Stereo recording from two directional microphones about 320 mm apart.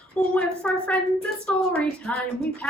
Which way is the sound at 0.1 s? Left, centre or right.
Centre.